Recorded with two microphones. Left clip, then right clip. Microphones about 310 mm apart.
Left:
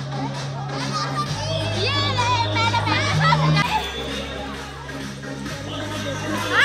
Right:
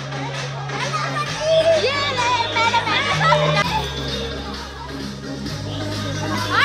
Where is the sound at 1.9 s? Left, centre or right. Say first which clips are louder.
Right 2 dB; centre.